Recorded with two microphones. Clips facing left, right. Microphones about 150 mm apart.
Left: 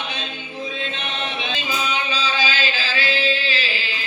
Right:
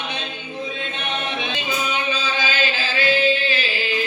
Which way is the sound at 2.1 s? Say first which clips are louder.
Even; 50° right (ahead or behind).